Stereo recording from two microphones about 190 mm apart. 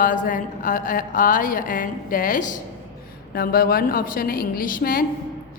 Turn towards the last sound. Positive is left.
turn(degrees=45)  # may be behind; listen again after turning